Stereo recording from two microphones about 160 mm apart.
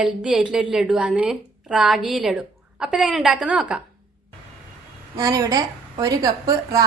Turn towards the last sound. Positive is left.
turn(degrees=-20)  # may be behind; listen again after turning